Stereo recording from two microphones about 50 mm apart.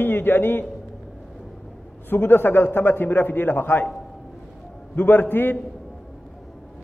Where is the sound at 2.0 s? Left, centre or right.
Left.